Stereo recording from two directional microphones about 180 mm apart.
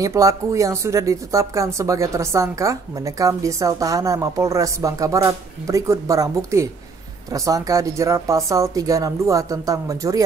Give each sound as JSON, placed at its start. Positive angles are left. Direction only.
{"t": 0.0, "sound": "speech", "side_deg": -20}